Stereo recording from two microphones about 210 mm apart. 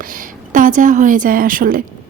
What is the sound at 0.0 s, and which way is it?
A woman's voice, 40° right (ahead or behind).